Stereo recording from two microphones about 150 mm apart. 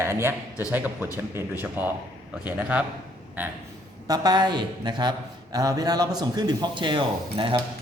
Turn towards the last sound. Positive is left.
turn(degrees=-35)  # may be behind; listen again after turning